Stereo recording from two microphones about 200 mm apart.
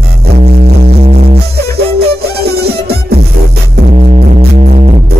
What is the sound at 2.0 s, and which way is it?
Music, 55° right (ahead or behind).